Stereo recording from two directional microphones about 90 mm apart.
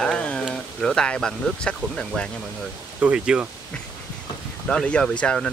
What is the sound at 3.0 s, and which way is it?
Speech, 10° right (ahead or behind).